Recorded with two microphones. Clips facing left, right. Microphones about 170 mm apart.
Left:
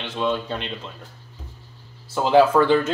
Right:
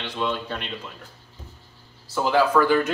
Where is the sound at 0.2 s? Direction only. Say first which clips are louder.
Left 3 dB; 20° left (ahead or behind).